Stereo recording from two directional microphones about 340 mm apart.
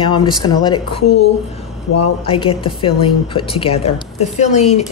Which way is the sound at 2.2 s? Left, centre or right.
Centre.